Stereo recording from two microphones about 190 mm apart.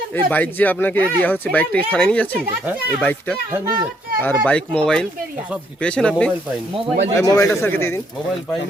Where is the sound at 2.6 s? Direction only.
10° right (ahead or behind).